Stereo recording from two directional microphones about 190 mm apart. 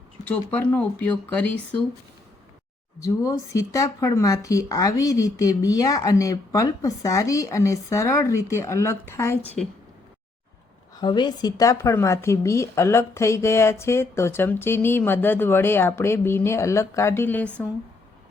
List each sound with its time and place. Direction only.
0.3 s speech: 10° left (ahead or behind)
3.0 s speech: 15° left (ahead or behind)
10.9 s speech: 20° left (ahead or behind); by 17.7 s 5° left (ahead or behind)